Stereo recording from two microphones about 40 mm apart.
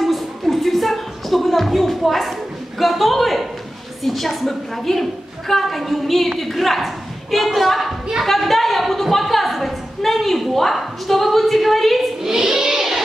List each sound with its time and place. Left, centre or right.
0.0 s music: centre
2.8 s a woman's voice: centre
12.2 s a sound: centre